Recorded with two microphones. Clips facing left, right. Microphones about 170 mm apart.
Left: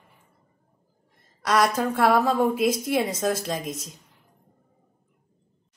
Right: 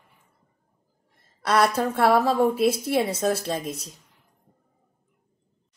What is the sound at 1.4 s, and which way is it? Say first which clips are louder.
A woman's voice: right 1 dB; 30° right (ahead or behind).